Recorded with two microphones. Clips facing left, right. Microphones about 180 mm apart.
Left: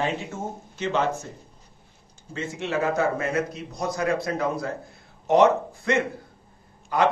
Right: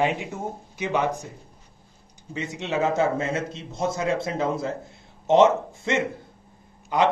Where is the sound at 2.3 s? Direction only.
20° right (ahead or behind).